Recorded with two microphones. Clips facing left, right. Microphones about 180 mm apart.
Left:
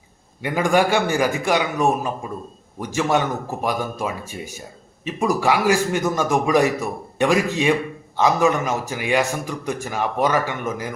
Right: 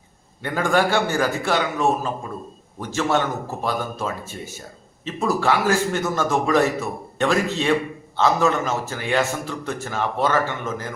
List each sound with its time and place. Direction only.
0.4 s a man's voice: 15° left (ahead or behind)